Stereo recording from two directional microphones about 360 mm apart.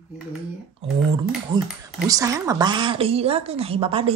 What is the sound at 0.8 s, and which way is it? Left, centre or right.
A woman's voice, centre.